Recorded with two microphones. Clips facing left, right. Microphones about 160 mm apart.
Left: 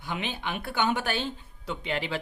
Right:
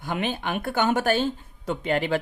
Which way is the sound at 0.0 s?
50° right (ahead or behind).